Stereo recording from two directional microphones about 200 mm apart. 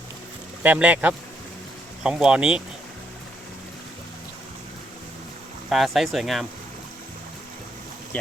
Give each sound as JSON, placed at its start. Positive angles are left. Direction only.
{"t": 0.6, "sound": "speech", "side_deg": -5}
{"t": 5.6, "sound": "speech", "side_deg": 0}